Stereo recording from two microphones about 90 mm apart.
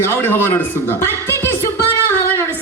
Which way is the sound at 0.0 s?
25° left (ahead or behind).